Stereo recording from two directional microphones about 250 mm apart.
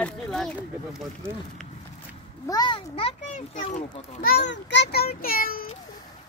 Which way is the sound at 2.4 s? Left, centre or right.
Centre.